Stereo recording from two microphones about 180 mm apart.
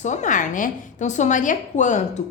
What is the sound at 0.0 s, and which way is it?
A woman's voice, 40° left (ahead or behind).